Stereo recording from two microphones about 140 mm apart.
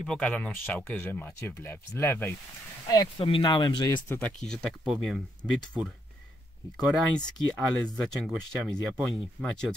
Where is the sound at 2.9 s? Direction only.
25° left (ahead or behind).